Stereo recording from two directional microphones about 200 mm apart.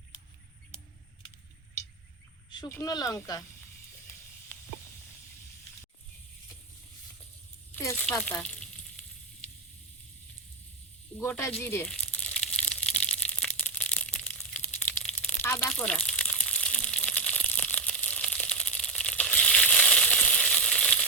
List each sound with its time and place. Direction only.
2.5 s speech: 15° left (ahead or behind)
7.7 s speech: 10° left (ahead or behind)
8.2 s sizzle: 5° left (ahead or behind)
11.2 s speech: 15° left (ahead or behind)
11.5 s crumpling: 10° left (ahead or behind)